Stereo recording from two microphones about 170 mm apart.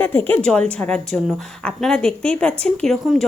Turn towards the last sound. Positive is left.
turn(degrees=0)  # may be behind; listen again after turning